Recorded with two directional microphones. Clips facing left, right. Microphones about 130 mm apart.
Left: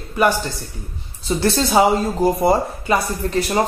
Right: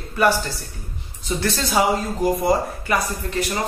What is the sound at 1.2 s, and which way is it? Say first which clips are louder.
A man's voice: left 5 dB; 30° left (ahead or behind).